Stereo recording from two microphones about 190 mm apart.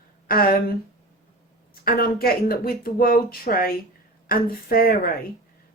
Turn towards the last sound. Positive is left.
turn(degrees=50)  # may be behind; listen again after turning